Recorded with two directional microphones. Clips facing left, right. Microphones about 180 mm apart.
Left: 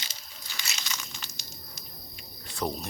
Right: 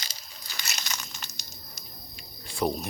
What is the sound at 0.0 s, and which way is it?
Crumpling, 40° right (ahead or behind).